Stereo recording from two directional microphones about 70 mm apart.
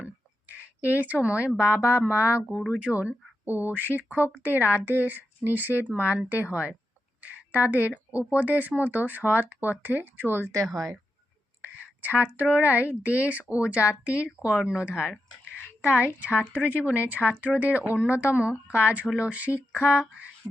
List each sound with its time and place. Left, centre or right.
0.4 s speech: right
11.6 s speech: right
16.2 s speech: right